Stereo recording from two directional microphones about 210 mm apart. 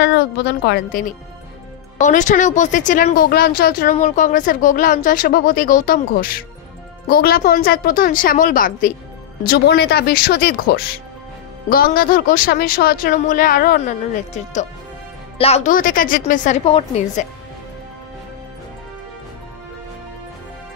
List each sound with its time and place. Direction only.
0.0 s speech: 55° left (ahead or behind); by 17.3 s 30° left (ahead or behind)